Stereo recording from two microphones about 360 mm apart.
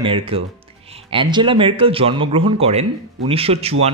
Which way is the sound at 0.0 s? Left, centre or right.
Centre.